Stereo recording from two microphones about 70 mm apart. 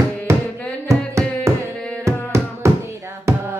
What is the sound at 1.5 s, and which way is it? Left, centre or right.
Carnatic music, right.